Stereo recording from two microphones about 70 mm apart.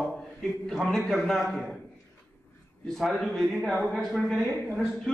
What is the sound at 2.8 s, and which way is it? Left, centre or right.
A man's voice, centre.